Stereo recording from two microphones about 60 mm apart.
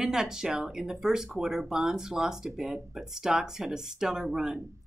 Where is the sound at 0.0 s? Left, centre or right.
Centre.